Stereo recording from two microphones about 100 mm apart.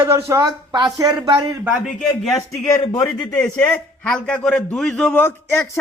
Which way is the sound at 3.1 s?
10° left (ahead or behind).